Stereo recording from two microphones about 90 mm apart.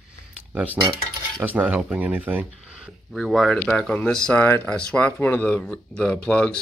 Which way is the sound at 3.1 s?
Centre (ahead or behind).